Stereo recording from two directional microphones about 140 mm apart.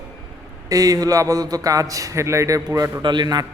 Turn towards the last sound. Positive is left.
turn(degrees=-30)  # may be behind; listen again after turning